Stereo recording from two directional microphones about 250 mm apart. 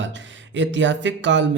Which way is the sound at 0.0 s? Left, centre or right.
Right.